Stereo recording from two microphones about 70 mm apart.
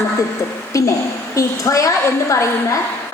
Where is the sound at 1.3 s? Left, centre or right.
Left.